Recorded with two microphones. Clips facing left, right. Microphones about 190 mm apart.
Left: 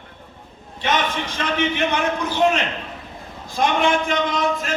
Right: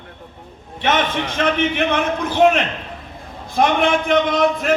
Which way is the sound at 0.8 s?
60° right (ahead or behind).